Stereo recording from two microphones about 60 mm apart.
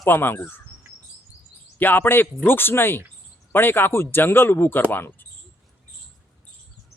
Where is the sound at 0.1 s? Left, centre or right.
Left.